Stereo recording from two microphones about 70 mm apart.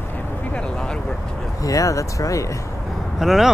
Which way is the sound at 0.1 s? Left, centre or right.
Centre.